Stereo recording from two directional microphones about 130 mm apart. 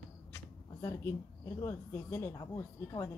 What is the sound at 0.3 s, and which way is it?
Speech, 20° left (ahead or behind).